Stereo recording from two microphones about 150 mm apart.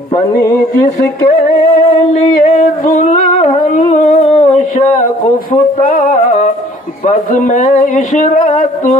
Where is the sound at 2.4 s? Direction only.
55° left (ahead or behind).